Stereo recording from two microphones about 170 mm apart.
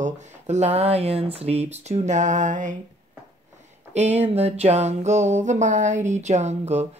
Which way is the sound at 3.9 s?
40° right (ahead or behind).